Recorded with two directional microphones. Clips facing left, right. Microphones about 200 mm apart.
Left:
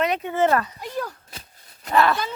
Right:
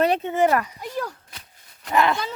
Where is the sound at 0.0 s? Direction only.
30° right (ahead or behind); by 0.8 s 15° right (ahead or behind).